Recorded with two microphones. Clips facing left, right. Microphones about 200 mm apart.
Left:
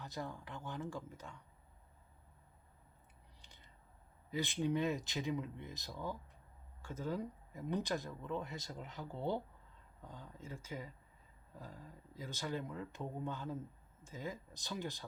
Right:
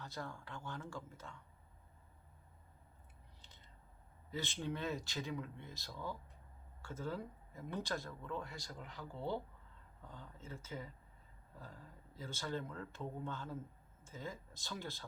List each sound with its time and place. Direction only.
0.0 s speech: 15° left (ahead or behind)
3.4 s a sound: 15° left (ahead or behind)
4.3 s speech: 15° left (ahead or behind)